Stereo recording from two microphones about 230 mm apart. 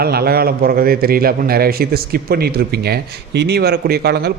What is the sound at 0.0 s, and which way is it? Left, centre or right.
A man's voice, right.